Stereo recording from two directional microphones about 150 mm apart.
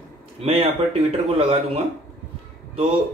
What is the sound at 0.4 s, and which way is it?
Speech, 45° right (ahead or behind).